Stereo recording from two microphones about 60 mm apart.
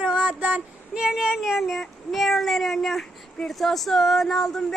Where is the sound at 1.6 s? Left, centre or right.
Centre.